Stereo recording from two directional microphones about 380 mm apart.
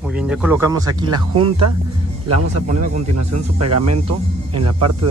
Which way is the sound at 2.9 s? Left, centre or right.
Right.